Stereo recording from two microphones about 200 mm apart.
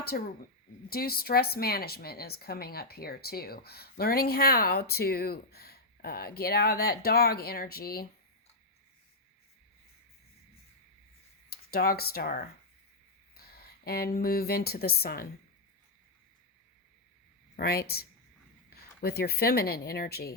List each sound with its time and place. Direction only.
0.1 s a woman's voice: 50° left (ahead or behind)
11.4 s speech: 50° left (ahead or behind)
13.3 s a sound: 50° left (ahead or behind)
14.2 s a woman's voice: 50° left (ahead or behind)
17.6 s a woman's voice: 50° left (ahead or behind)